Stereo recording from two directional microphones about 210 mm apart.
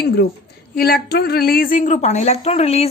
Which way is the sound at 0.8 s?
50° left (ahead or behind).